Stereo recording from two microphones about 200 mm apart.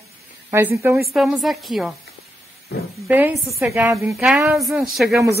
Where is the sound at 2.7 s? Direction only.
55° left (ahead or behind).